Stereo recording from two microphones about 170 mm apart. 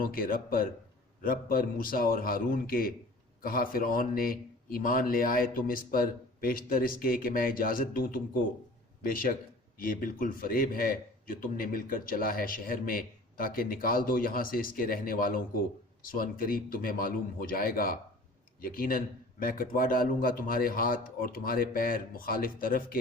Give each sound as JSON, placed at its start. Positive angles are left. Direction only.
{"t": 0.0, "sound": "a man's voice", "side_deg": 55}